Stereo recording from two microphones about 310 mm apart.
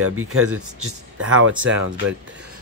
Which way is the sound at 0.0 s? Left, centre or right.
Right.